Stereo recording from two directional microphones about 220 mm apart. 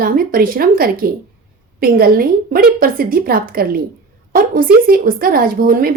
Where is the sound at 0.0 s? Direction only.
40° right (ahead or behind).